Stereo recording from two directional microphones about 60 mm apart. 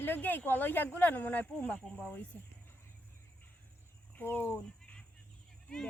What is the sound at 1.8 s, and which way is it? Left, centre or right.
Speech, centre.